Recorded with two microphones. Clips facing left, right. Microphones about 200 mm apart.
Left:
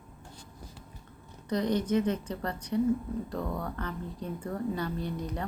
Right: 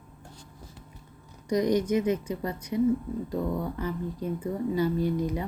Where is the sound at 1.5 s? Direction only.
10° right (ahead or behind).